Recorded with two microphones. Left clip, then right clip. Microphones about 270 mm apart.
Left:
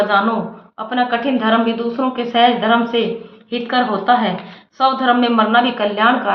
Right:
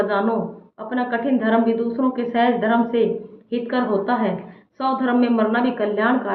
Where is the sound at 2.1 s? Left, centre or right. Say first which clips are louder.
Left 8 dB; left.